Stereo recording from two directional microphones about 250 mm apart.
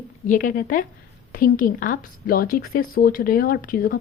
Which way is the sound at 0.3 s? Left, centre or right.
Left.